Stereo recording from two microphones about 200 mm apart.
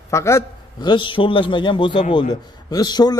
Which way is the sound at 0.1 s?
15° left (ahead or behind).